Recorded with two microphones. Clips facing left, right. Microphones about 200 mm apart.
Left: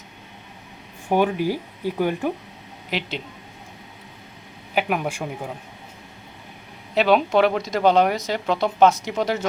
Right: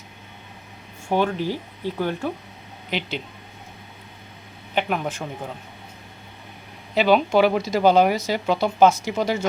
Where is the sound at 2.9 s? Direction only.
Centre (ahead or behind).